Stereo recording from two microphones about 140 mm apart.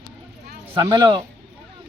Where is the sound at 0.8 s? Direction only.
35° right (ahead or behind).